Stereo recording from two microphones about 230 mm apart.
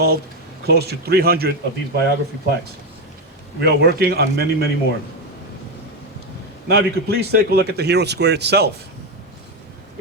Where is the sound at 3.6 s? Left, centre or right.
Right.